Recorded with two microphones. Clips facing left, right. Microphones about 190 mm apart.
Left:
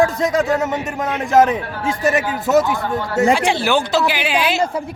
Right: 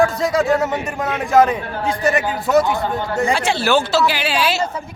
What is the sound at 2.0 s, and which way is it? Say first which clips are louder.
Speech: left 1 dB; centre (ahead or behind).